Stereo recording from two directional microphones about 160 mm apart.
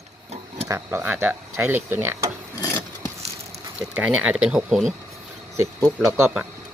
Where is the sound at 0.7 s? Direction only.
15° right (ahead or behind).